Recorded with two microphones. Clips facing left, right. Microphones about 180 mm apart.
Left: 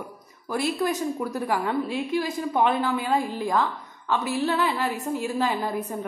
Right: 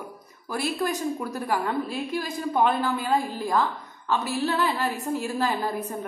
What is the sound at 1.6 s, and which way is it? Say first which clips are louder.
A woman's voice: left 2 dB; 20° left (ahead or behind).